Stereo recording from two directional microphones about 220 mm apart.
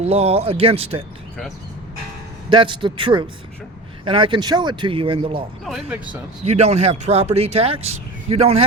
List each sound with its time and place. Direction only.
0.0 s speech: 30° right (ahead or behind)
2.5 s speech: 20° right (ahead or behind)
5.6 s speech: 5° right (ahead or behind)
6.4 s speech: 30° right (ahead or behind)